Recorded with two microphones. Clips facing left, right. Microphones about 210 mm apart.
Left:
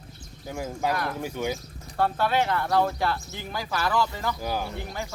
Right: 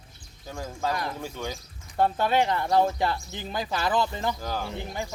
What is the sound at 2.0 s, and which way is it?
Speech, 20° right (ahead or behind).